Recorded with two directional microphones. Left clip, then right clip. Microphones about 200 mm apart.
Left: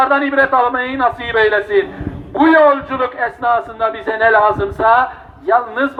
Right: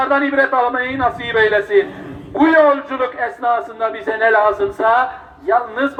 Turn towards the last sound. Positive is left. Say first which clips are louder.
# left 2 dB
turn(degrees=20)  # may be behind; listen again after turning